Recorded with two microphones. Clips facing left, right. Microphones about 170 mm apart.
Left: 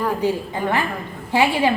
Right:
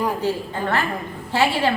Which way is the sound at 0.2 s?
15° left (ahead or behind).